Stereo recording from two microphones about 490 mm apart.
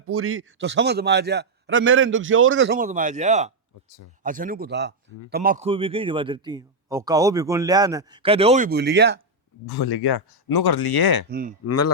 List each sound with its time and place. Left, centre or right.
0.1 s a man's voice: right
9.6 s speech: left
11.3 s a man's voice: centre
11.6 s a man's voice: left